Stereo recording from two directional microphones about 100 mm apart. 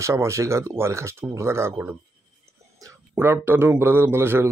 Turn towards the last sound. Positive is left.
turn(degrees=-25)  # may be behind; listen again after turning